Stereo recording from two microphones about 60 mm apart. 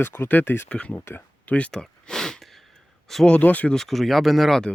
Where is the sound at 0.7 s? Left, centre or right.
Left.